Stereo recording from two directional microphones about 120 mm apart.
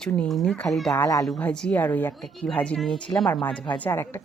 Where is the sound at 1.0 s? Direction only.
30° left (ahead or behind).